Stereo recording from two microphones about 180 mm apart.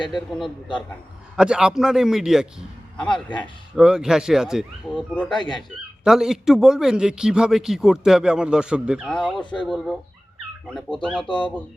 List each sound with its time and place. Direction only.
0.3 s speech: centre (ahead or behind)
3.8 s speech: 5° right (ahead or behind)
5.3 s speech: 25° left (ahead or behind)
6.1 s speech: centre (ahead or behind)
11.3 s speech: 25° left (ahead or behind)